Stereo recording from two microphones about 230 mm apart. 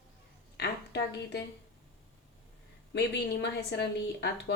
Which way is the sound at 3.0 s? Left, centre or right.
Left.